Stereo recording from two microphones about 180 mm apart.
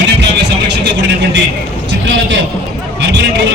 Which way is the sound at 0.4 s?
75° right (ahead or behind).